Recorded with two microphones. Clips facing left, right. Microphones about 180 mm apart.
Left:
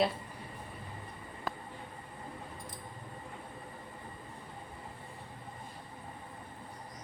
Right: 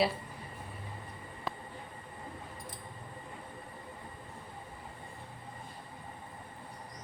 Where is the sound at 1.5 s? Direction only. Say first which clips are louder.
Even; centre (ahead or behind).